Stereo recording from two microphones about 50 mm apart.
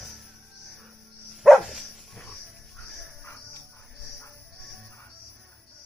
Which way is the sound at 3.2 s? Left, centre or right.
Left.